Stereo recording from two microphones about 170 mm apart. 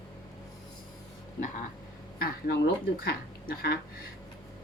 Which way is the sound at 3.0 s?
60° left (ahead or behind).